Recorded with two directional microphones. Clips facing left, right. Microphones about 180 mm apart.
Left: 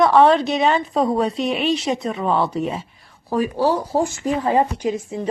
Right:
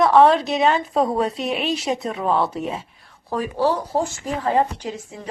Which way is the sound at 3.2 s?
10° left (ahead or behind).